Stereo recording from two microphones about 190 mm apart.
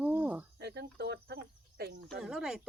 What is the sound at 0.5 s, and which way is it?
Speech, 60° right (ahead or behind).